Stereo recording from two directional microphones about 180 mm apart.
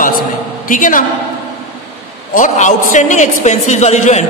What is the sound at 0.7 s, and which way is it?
Speech, 50° left (ahead or behind).